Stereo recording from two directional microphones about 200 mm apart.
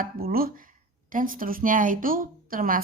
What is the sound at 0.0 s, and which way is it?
A woman's voice, 45° right (ahead or behind).